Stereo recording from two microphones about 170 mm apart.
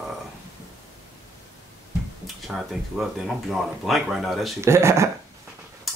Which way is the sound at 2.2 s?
Centre (ahead or behind).